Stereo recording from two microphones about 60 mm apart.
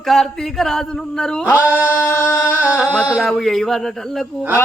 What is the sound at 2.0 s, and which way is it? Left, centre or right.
Music, left.